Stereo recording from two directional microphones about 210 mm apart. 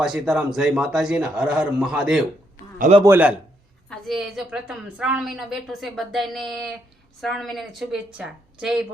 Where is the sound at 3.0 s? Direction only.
10° right (ahead or behind).